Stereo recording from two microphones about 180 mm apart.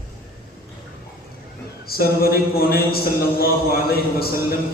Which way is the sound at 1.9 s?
55° left (ahead or behind).